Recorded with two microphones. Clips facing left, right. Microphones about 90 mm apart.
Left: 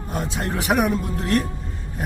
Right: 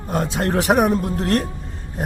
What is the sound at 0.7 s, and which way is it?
Speech, 40° right (ahead or behind).